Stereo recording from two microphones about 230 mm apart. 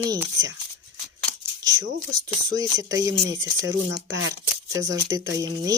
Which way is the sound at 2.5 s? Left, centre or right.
Centre.